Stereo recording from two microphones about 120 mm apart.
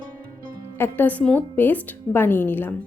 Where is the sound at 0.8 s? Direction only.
15° left (ahead or behind).